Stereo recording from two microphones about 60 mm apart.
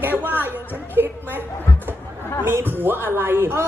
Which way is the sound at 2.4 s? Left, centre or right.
Right.